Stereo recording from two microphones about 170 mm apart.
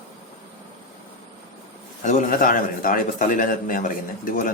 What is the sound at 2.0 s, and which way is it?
A man's voice, 50° left (ahead or behind).